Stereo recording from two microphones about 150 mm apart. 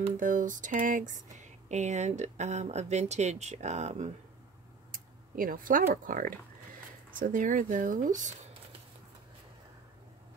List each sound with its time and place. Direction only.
0.2 s speech: 60° right (ahead or behind)
4.9 s a sound: 70° right (ahead or behind)
6.0 s speech: 65° right (ahead or behind)